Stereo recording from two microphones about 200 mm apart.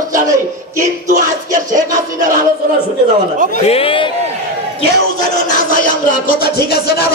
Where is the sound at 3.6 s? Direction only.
30° left (ahead or behind).